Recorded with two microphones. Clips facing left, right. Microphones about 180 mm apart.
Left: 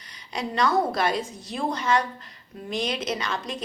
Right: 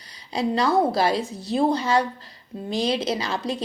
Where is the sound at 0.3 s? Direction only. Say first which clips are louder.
Right 3 dB; 30° right (ahead or behind).